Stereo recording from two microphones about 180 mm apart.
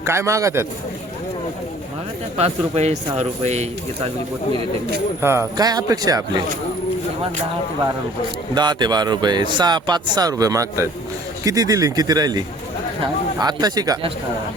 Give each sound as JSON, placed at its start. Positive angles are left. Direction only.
{"t": 0.0, "sound": "a man's voice", "side_deg": -15}
{"t": 2.4, "sound": "speech", "side_deg": -35}
{"t": 5.2, "sound": "speech", "side_deg": -15}
{"t": 8.5, "sound": "speech", "side_deg": -25}